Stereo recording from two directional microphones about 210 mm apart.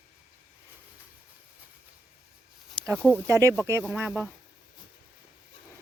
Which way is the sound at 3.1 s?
15° right (ahead or behind).